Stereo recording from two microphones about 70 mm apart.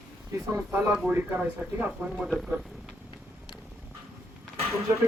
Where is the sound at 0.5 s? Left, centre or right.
Right.